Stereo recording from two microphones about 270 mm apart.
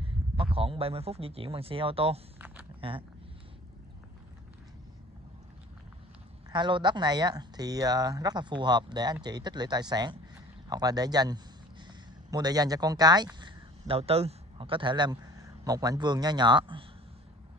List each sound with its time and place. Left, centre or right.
0.4 s speech: right
6.5 s speech: centre